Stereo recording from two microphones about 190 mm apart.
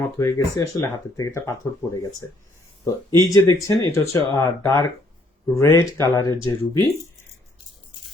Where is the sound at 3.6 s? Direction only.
15° left (ahead or behind).